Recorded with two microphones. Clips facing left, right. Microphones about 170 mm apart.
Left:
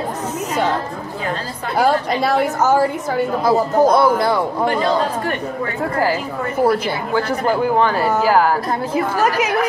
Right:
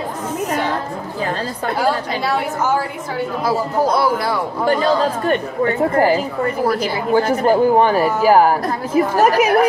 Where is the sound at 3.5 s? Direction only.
20° left (ahead or behind).